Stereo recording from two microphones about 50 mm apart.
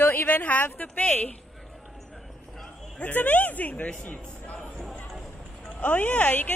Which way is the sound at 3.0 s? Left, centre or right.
Left.